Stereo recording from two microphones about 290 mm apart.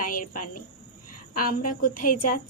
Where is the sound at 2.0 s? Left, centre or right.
Left.